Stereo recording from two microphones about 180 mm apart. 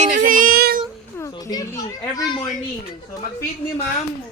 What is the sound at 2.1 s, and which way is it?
Speech, 20° left (ahead or behind).